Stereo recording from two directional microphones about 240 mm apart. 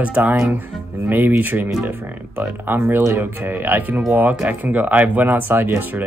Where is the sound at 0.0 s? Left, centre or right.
Centre.